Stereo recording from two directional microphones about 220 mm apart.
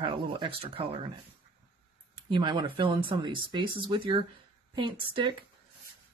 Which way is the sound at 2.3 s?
20° right (ahead or behind).